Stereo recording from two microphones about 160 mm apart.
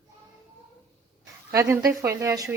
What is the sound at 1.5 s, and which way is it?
Speech, 15° right (ahead or behind).